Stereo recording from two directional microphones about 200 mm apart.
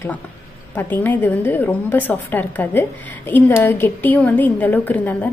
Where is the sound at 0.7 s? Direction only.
10° left (ahead or behind).